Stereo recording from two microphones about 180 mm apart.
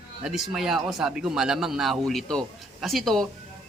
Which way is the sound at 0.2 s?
Centre (ahead or behind).